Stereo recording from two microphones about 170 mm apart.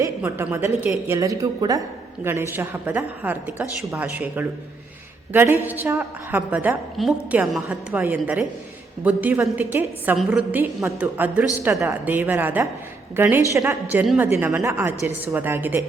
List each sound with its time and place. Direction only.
0.2 s a woman's voice: 15° right (ahead or behind)